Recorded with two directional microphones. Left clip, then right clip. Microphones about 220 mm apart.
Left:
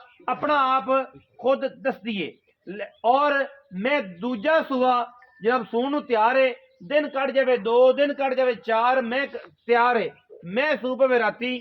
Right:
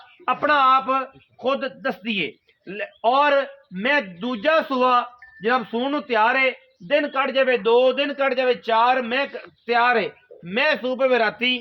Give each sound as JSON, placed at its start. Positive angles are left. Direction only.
{"t": 0.3, "sound": "a man's voice", "side_deg": -35}